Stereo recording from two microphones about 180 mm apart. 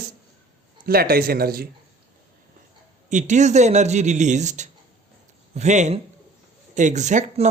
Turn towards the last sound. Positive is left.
turn(degrees=-40)  # may be behind; listen again after turning